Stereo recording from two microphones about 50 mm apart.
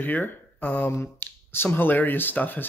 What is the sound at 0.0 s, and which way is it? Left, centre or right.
Speech, left.